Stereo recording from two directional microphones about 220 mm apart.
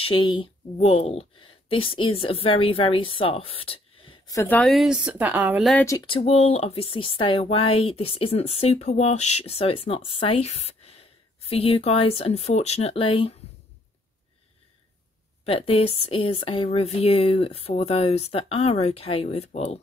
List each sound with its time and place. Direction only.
0.0 s a woman's voice: 20° left (ahead or behind)
4.4 s a woman's voice: 5° left (ahead or behind)
5.9 s speech: 20° left (ahead or behind)
15.4 s speech: 25° left (ahead or behind)